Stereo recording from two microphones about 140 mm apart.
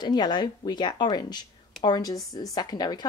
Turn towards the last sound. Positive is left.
turn(degrees=30)  # may be behind; listen again after turning